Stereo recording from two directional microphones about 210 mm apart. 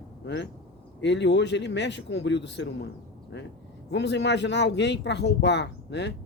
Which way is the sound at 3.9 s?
55° left (ahead or behind).